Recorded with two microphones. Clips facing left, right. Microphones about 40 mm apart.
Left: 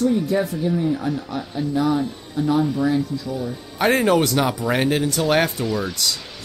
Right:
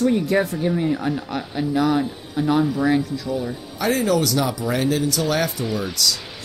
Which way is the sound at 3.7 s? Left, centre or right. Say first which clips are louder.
Left 3 dB; left.